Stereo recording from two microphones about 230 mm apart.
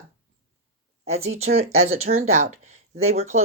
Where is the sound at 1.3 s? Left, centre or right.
Right.